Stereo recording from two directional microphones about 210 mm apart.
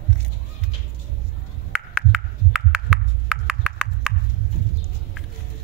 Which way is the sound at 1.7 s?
5° right (ahead or behind).